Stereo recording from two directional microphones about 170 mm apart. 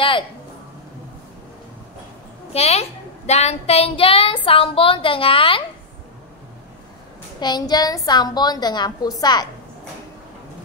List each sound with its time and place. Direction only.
2.5 s a woman's voice: 40° left (ahead or behind)
7.3 s a woman's voice: 25° left (ahead or behind)